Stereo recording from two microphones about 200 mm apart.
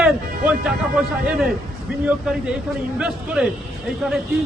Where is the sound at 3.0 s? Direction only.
5° right (ahead or behind).